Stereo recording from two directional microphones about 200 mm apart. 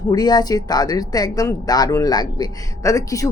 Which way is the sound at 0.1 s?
20° left (ahead or behind).